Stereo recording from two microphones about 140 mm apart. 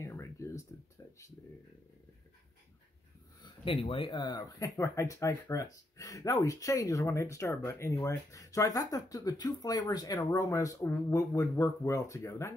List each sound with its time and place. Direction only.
0.0 s a sound: 20° left (ahead or behind)
3.8 s speech: 40° left (ahead or behind)
4.7 s speech: 20° left (ahead or behind)